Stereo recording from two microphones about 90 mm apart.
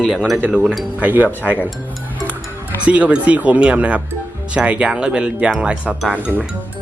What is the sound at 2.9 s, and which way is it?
Speech, 15° right (ahead or behind).